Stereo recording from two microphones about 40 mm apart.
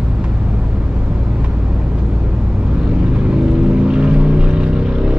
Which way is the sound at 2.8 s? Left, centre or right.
Right.